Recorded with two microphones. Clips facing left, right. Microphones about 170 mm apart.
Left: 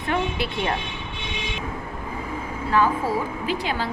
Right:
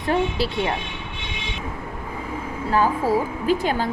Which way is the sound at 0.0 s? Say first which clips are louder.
Right 3 dB; 35° right (ahead or behind).